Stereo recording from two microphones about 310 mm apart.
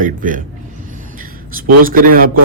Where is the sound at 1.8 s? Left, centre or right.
Right.